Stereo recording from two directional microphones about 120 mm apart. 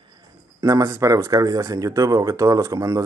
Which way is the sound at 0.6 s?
25° right (ahead or behind).